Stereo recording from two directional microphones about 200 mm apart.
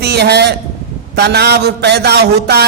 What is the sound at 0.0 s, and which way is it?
A man's voice, 55° right (ahead or behind).